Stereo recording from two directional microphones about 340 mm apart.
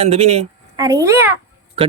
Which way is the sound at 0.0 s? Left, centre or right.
Centre.